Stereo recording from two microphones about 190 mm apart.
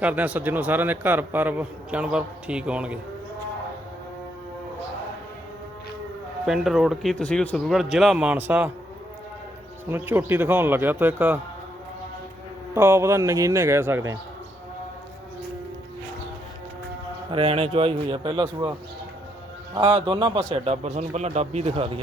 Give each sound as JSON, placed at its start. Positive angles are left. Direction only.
{"t": 0.0, "sound": "a man's voice", "side_deg": -5}
{"t": 6.4, "sound": "a man's voice", "side_deg": 0}
{"t": 9.9, "sound": "a man's voice", "side_deg": -10}
{"t": 12.7, "sound": "a man's voice", "side_deg": -15}
{"t": 17.3, "sound": "a man's voice", "side_deg": -30}
{"t": 19.7, "sound": "a man's voice", "side_deg": -25}